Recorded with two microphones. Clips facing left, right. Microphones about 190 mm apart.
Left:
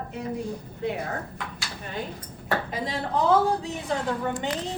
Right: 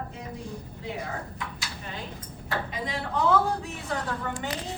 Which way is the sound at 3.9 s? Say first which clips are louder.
Left 4 dB; 20° left (ahead or behind).